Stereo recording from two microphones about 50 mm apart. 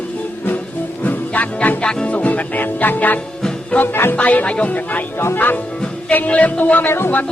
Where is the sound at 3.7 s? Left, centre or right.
Left.